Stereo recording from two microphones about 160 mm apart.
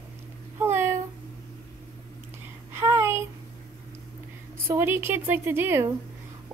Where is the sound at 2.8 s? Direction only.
20° right (ahead or behind).